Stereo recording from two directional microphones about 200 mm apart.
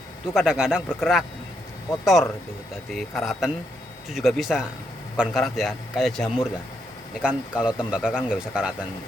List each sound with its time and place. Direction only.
0.3 s a man's voice: 5° right (ahead or behind)